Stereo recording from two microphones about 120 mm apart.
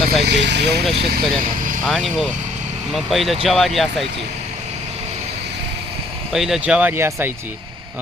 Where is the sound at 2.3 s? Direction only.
90° right.